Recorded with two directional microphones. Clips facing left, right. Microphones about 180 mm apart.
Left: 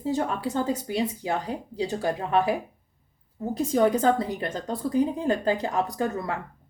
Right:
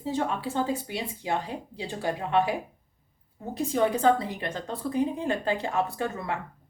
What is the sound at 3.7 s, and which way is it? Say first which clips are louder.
A woman's voice: left 1 dB; 40° left (ahead or behind).